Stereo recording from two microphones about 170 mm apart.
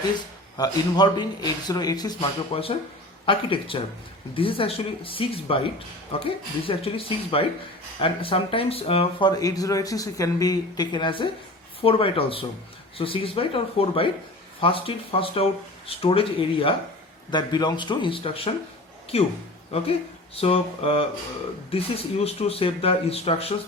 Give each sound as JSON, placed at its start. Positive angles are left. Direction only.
{"t": 0.5, "sound": "speech", "side_deg": 20}